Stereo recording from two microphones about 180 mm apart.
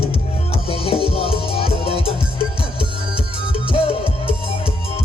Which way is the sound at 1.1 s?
30° left (ahead or behind).